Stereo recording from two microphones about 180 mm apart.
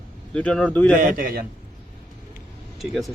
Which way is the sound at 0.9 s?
50° right (ahead or behind).